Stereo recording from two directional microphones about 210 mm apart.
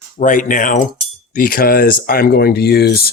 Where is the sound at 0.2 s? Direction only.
40° left (ahead or behind).